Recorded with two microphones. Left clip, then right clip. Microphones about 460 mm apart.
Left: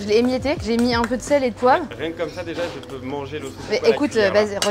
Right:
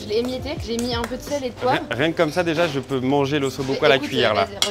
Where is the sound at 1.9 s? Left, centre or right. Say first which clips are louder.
Right 6 dB; right.